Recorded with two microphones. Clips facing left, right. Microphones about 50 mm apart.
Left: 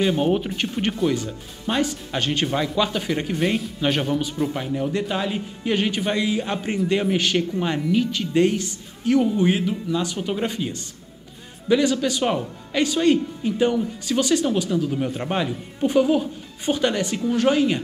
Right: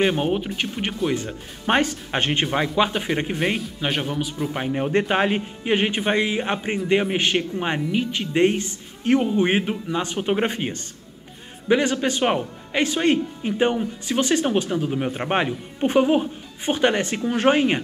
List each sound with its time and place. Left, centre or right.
0.0 s speech: right
0.3 s speech: centre
1.1 s speech: right
2.4 s speech: right
3.5 s speech: centre
4.6 s speech: right
5.6 s speech: right